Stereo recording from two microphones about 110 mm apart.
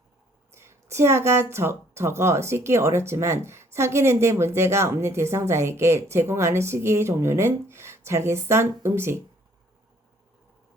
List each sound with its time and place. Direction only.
0.5 s a woman's voice: 25° right (ahead or behind)